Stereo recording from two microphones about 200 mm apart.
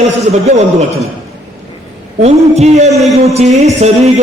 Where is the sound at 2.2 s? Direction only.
35° right (ahead or behind).